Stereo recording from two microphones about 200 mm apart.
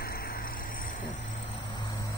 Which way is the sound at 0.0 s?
50° left (ahead or behind).